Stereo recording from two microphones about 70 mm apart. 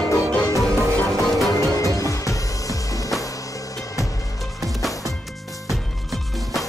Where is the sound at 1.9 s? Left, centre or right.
Left.